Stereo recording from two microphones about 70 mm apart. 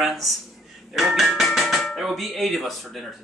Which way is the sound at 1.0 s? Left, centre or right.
Centre.